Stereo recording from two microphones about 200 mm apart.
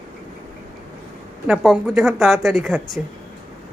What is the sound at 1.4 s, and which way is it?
Speech, 5° right (ahead or behind).